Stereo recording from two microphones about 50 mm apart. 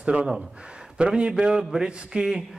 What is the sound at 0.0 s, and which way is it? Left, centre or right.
A man's voice, right.